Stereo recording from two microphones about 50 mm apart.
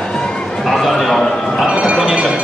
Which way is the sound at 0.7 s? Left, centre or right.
Centre.